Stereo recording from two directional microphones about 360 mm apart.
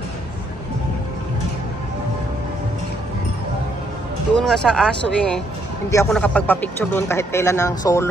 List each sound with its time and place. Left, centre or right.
4.4 s speech: centre